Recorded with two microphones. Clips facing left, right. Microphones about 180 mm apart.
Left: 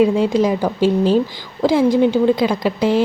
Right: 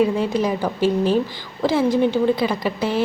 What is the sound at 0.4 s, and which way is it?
Speech, 10° left (ahead or behind).